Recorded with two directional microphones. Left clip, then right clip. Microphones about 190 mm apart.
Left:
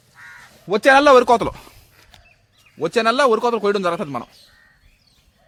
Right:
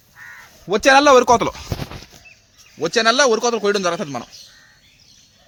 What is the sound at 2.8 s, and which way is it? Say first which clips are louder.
A man's voice: right 1 dB; 5° right (ahead or behind).